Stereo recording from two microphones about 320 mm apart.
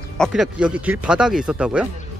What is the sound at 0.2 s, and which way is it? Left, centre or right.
Speech, centre.